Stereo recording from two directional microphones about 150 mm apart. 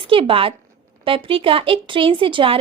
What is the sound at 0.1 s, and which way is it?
A woman's voice, 35° right (ahead or behind).